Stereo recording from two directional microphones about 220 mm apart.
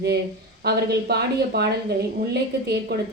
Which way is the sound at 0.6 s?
45° right (ahead or behind).